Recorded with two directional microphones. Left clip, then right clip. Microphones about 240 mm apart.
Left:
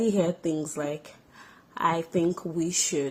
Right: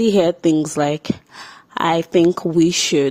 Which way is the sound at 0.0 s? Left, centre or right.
Right.